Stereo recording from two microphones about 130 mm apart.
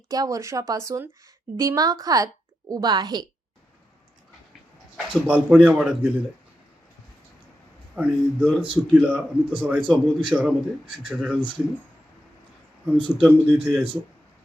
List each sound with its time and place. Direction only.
0.1 s a woman's voice: 25° right (ahead or behind)
5.2 s a man's voice: 10° right (ahead or behind)
7.9 s a man's voice: 10° right (ahead or behind)
12.8 s a man's voice: 10° right (ahead or behind)